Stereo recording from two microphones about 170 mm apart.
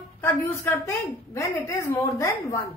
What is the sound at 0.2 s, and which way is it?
A woman's voice, 10° left (ahead or behind).